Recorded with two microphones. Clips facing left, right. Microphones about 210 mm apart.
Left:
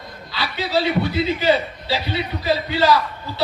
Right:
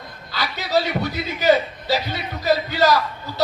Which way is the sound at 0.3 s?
45° right (ahead or behind).